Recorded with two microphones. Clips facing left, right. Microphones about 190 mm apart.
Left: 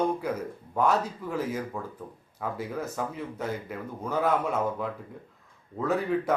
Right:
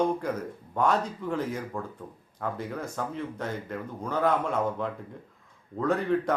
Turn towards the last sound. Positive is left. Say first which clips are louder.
# right 1 dB
turn(degrees=5)  # may be behind; listen again after turning